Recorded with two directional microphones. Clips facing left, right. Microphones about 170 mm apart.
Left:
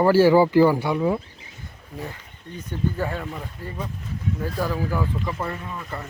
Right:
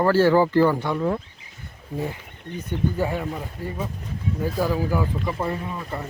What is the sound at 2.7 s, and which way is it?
A man's voice, 15° right (ahead or behind).